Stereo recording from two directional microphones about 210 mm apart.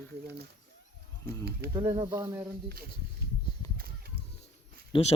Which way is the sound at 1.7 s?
20° right (ahead or behind).